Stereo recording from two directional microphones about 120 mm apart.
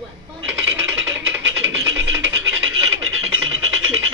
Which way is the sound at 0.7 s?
20° right (ahead or behind).